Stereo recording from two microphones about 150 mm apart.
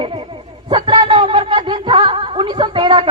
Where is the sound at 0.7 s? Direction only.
35° right (ahead or behind).